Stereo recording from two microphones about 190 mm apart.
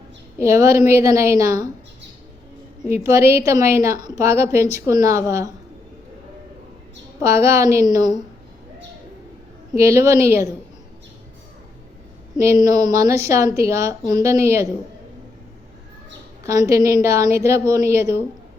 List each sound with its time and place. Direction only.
0.3 s a woman's voice: 15° right (ahead or behind)
2.9 s a woman's voice: 15° right (ahead or behind)
7.2 s a woman's voice: 15° right (ahead or behind)
9.7 s a woman's voice: 15° right (ahead or behind)
12.4 s a woman's voice: 20° right (ahead or behind)
16.4 s a woman's voice: 15° right (ahead or behind)